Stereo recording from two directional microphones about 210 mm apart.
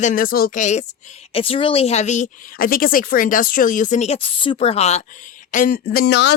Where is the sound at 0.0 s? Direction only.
40° left (ahead or behind).